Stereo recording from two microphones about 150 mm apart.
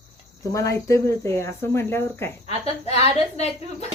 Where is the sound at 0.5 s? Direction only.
20° left (ahead or behind).